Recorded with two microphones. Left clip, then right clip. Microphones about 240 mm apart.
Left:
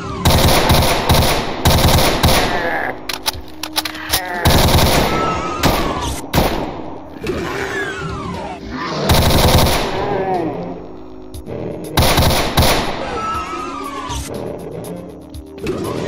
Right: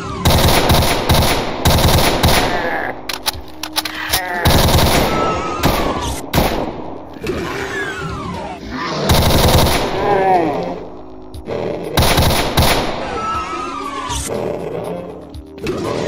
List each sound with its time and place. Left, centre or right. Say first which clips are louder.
0.0 s machine gun: even; centre
4.1 s fireworks: even; centre
7.2 s a sound: even; centre
10.1 s a sound: right 6 dB; right
11.9 s fireworks: left 1 dB; centre
15.6 s music: right 2 dB; centre